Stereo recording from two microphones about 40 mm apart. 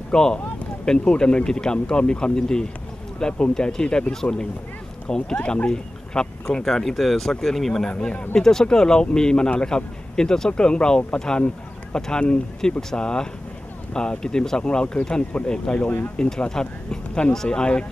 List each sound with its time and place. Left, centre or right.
0.1 s speech: centre
7.8 s speech: left
8.4 s speech: centre